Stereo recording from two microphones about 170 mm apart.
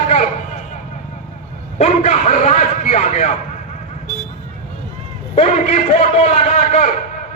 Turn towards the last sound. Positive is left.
turn(degrees=40)  # may be behind; listen again after turning